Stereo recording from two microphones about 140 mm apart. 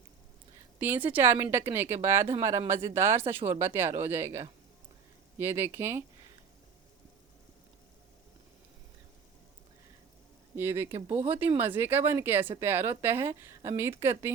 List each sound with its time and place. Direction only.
0.8 s speech: 15° right (ahead or behind)
10.6 s speech: 15° right (ahead or behind)